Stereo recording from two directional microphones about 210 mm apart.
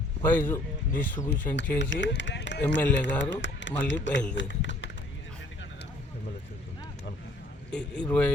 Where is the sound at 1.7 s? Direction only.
60° left (ahead or behind).